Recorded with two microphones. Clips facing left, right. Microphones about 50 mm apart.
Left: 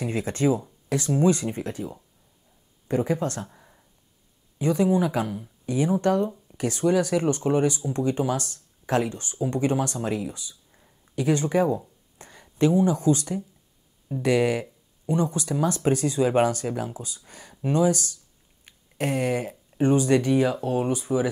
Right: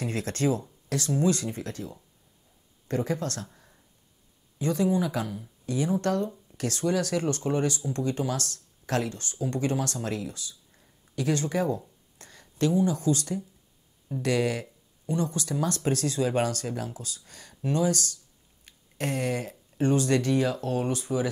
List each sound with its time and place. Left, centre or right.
0.0 s speech: centre
18.7 s a sound: centre
19.8 s speech: centre